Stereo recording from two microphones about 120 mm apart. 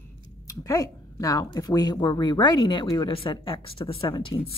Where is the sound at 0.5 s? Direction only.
30° left (ahead or behind).